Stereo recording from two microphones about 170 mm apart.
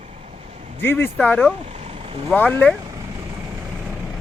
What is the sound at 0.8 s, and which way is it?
Speech, 15° left (ahead or behind).